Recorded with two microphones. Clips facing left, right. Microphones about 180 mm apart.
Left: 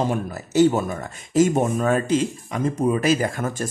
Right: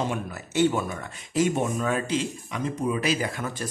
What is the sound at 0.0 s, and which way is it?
Speech, 40° left (ahead or behind).